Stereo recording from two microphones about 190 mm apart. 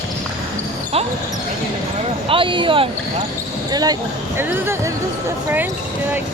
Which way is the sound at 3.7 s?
20° right (ahead or behind).